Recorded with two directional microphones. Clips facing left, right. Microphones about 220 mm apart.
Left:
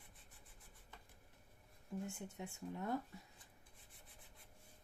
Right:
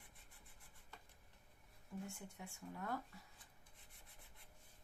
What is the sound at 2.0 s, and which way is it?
Speech, 20° left (ahead or behind).